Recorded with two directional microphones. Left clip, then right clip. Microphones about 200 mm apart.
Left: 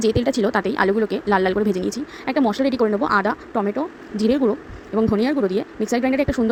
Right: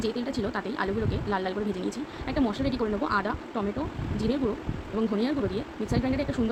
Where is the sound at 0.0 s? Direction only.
40° left (ahead or behind).